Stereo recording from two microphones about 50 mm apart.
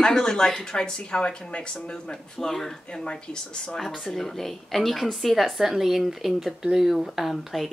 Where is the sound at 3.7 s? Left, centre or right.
Centre.